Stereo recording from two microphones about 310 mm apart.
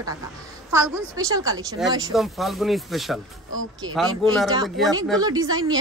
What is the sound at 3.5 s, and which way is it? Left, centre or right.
Speech, right.